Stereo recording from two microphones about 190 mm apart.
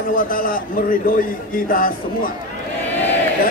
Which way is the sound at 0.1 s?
45° left (ahead or behind).